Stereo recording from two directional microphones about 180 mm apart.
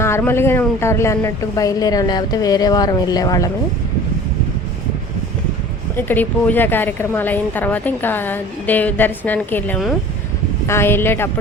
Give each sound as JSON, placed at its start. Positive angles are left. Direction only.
{"t": 0.0, "sound": "speech", "side_deg": 15}
{"t": 6.0, "sound": "speech", "side_deg": 10}